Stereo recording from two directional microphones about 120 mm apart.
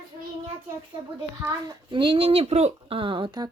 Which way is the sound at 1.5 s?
40° right (ahead or behind).